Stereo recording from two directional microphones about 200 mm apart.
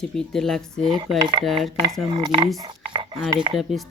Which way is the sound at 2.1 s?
25° right (ahead or behind).